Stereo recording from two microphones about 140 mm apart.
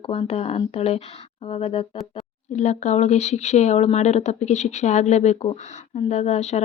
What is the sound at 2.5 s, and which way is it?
Speech, 55° left (ahead or behind).